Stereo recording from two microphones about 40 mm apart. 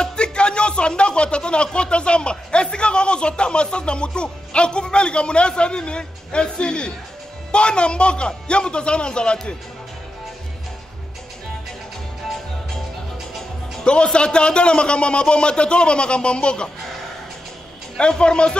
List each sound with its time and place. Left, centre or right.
0.0 s a man's voice: left
13.8 s a man's voice: left
17.9 s a man's voice: left